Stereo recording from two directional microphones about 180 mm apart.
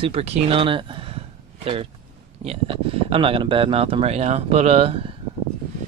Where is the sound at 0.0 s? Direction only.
35° right (ahead or behind).